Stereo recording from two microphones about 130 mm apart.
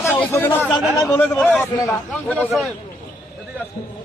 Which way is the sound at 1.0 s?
25° left (ahead or behind).